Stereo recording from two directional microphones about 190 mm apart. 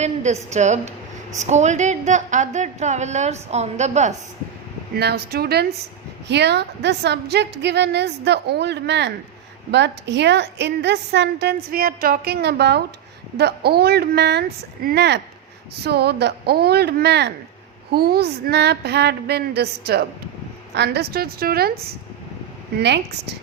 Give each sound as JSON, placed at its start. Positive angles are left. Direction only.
{"t": 0.0, "sound": "a woman's voice", "side_deg": -35}
{"t": 4.9, "sound": "a woman's voice", "side_deg": -60}